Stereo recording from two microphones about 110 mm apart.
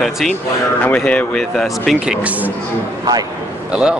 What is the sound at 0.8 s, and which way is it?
Speech, 10° left (ahead or behind).